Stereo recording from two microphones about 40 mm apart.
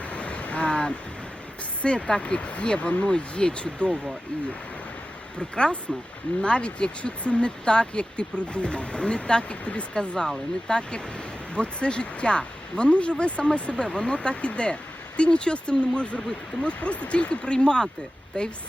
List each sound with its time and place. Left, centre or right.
0.1 s waves: left
1.8 s speech: left
5.4 s speech: left